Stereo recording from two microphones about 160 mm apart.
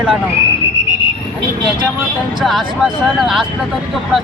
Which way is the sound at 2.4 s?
Centre (ahead or behind).